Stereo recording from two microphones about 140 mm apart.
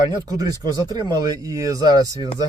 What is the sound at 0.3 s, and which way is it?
Speech, 25° right (ahead or behind).